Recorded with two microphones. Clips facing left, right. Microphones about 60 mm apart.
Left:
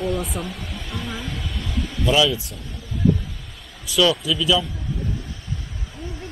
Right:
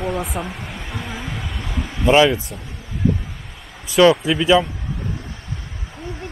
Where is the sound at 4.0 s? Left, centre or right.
Right.